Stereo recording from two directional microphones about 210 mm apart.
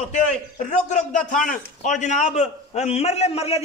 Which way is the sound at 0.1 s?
35° left (ahead or behind).